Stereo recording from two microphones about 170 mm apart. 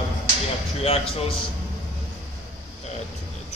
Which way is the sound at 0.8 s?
35° left (ahead or behind).